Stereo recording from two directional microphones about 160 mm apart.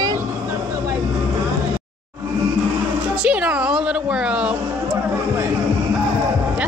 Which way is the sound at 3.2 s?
10° right (ahead or behind).